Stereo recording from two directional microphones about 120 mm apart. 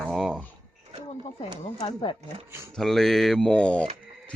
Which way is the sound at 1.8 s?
40° left (ahead or behind).